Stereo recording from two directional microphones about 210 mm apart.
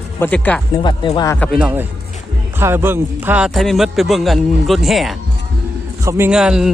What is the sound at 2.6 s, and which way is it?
A man's voice, 10° right (ahead or behind).